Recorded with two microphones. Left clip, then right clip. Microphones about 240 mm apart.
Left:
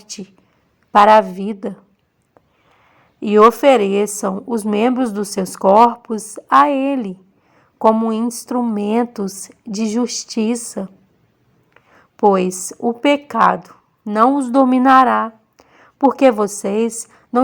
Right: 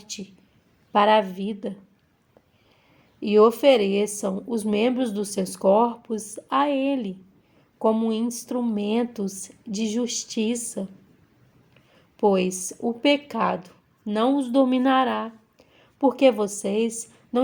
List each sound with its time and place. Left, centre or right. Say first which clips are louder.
0.0 s speech: left 4 dB; left
3.2 s a woman's voice: left 7 dB; left
11.7 s a sound: left 10 dB; left
12.6 s speech: left 6 dB; left